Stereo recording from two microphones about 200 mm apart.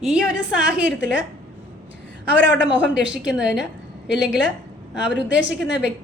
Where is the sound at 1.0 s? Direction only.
60° left (ahead or behind).